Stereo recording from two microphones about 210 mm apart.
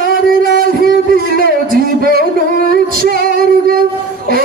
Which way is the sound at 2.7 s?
45° right (ahead or behind).